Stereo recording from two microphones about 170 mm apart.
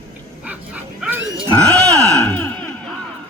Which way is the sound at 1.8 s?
20° right (ahead or behind).